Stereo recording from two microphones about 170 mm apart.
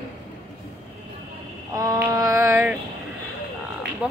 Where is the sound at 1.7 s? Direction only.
20° right (ahead or behind).